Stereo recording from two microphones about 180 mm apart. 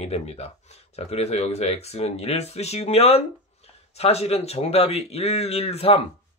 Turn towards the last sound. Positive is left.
turn(degrees=35)  # may be behind; listen again after turning